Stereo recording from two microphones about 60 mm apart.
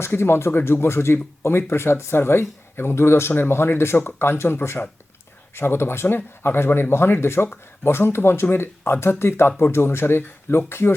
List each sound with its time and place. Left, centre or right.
0.0 s speech: left